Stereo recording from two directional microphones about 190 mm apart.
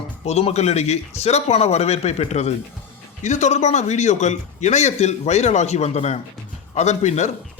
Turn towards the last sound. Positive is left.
turn(degrees=35)  # may be behind; listen again after turning